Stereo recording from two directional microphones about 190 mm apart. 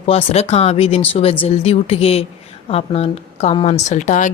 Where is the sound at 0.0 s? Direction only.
30° left (ahead or behind).